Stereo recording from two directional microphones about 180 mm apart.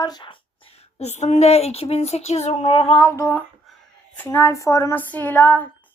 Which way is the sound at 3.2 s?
10° left (ahead or behind).